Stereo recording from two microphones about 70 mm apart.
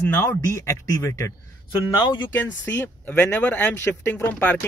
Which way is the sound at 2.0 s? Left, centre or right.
Left.